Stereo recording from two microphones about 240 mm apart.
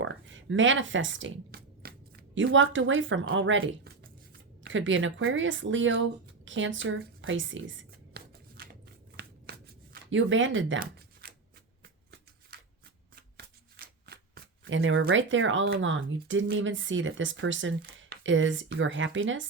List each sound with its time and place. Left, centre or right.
0.0 s speech: right
9.1 s shuffling cards: right
13.3 s shuffling cards: right
15.0 s speech: right